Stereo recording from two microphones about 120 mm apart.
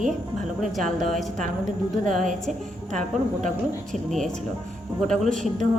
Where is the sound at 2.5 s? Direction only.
90° right.